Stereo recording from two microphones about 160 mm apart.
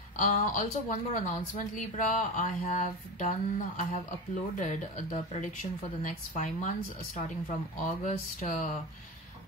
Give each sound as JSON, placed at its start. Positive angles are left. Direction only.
{"t": 0.1, "sound": "speech", "side_deg": 55}